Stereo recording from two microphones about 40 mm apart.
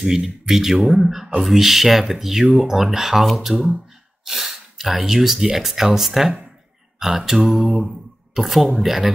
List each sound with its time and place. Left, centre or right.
0.0 s speech: centre
2.4 s speech: right
2.8 s speech: centre